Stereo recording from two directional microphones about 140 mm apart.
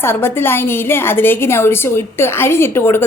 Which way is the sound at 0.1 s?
15° left (ahead or behind).